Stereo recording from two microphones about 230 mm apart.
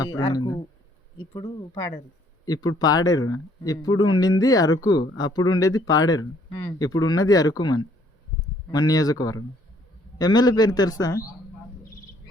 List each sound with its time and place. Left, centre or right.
0.2 s speech: centre